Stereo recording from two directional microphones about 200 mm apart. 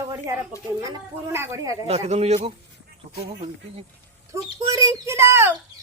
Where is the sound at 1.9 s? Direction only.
30° right (ahead or behind).